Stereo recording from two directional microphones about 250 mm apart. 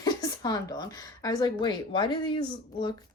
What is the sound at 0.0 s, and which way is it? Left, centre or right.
Speech, centre.